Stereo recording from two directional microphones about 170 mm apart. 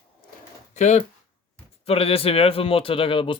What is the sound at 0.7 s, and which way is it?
Speech, 45° left (ahead or behind).